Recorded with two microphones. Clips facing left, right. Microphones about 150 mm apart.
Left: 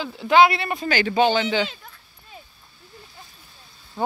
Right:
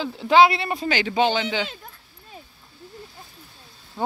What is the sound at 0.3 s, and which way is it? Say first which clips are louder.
Speech: even; 25° right (ahead or behind).